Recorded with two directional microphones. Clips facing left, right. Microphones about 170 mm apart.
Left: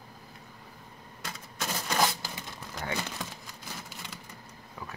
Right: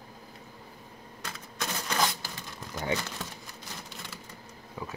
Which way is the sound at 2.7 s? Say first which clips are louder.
Right 4 dB; 15° right (ahead or behind).